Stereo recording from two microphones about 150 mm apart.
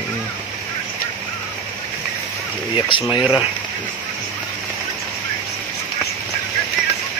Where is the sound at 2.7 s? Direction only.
35° left (ahead or behind).